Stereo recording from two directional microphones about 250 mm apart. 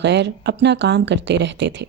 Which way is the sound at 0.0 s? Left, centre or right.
Right.